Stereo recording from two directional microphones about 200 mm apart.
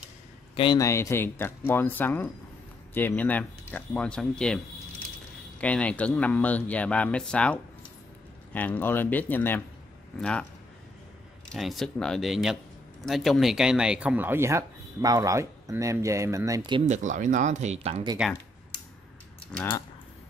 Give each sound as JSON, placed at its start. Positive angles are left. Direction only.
{"t": 0.6, "sound": "speech", "side_deg": 20}
{"t": 5.6, "sound": "speech", "side_deg": 5}
{"t": 11.4, "sound": "speech", "side_deg": 0}
{"t": 16.8, "sound": "speech", "side_deg": -35}
{"t": 19.4, "sound": "mechanisms", "side_deg": 5}